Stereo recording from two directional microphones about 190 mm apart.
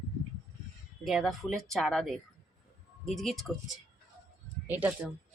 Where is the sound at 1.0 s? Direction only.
Centre (ahead or behind).